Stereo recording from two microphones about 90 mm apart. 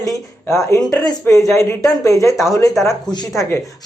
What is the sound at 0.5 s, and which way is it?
Speech, 35° left (ahead or behind).